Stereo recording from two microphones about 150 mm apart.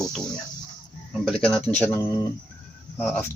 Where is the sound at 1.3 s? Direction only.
5° left (ahead or behind).